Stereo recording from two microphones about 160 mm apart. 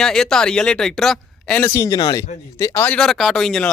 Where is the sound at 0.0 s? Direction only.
5° left (ahead or behind).